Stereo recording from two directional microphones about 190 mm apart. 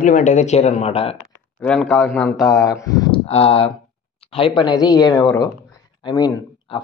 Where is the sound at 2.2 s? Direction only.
15° left (ahead or behind).